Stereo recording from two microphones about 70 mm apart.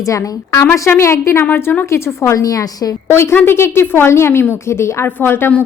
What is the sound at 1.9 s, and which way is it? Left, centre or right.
Speech, left.